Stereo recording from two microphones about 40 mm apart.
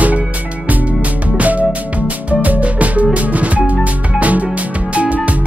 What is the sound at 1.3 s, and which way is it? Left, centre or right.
Music, right.